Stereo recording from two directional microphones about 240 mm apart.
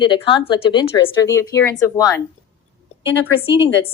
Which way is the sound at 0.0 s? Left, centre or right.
Centre.